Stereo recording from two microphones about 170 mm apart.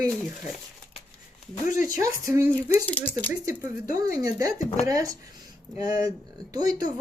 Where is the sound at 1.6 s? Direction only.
50° left (ahead or behind).